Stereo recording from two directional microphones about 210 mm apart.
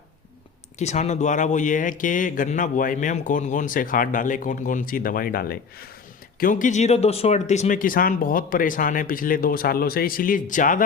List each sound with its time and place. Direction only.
0.8 s speech: 35° left (ahead or behind)